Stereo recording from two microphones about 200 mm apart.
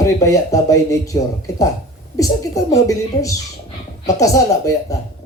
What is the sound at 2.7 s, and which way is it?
A man's voice, 15° left (ahead or behind).